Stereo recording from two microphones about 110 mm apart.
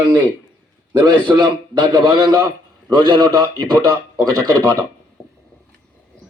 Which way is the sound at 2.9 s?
40° right (ahead or behind).